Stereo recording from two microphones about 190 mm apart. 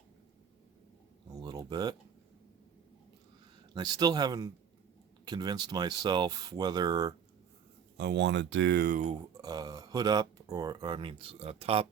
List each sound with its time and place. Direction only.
1.3 s a sound: 20° right (ahead or behind)
3.8 s speech: 20° right (ahead or behind)
7.9 s speech: 65° right (ahead or behind)
9.1 s speech: 20° right (ahead or behind)